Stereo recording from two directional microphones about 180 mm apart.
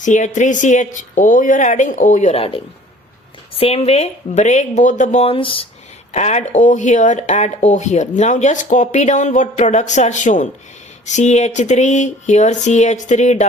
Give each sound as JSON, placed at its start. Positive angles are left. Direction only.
{"t": 0.0, "sound": "speech", "side_deg": 45}
{"t": 6.1, "sound": "speech", "side_deg": 40}